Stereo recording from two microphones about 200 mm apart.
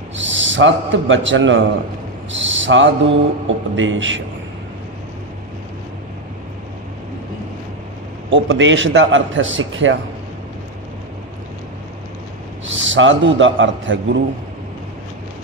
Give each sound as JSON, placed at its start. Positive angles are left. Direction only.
{"t": 0.2, "sound": "a man's voice", "side_deg": -70}
{"t": 2.3, "sound": "mantra", "side_deg": -70}
{"t": 8.3, "sound": "mantra", "side_deg": -65}
{"t": 12.6, "sound": "a man's voice", "side_deg": -70}